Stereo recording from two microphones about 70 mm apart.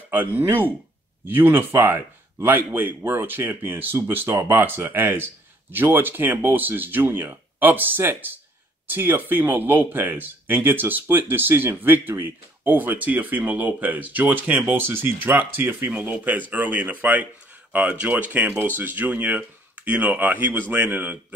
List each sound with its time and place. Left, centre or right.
0.1 s speech: right